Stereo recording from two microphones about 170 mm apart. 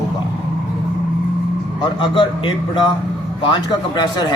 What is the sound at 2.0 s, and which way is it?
Speech, 30° left (ahead or behind).